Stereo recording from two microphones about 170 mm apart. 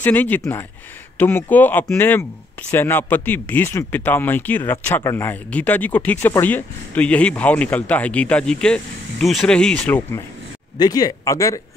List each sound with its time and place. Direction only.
0.0 s speech: 10° left (ahead or behind)
10.8 s speech: 20° left (ahead or behind)